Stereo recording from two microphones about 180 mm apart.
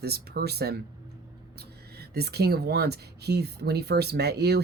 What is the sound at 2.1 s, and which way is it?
Speech, 65° right (ahead or behind).